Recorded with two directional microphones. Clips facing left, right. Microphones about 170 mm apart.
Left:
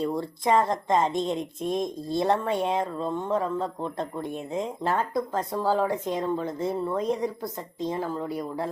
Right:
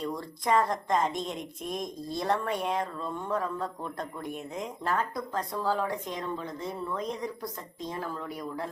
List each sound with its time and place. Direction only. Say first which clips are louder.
0.0 s a woman's voice: left 6 dB; 25° left (ahead or behind)